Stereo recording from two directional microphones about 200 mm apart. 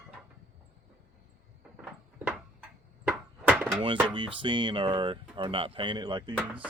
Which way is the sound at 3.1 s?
10° right (ahead or behind).